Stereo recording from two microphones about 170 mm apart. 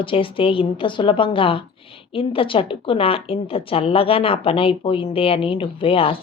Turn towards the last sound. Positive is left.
turn(degrees=35)  # may be behind; listen again after turning